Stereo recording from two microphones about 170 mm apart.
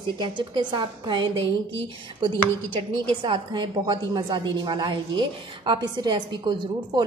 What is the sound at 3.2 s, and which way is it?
A woman's voice, 25° right (ahead or behind).